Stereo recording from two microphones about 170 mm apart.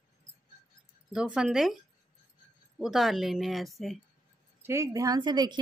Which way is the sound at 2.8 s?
Centre (ahead or behind).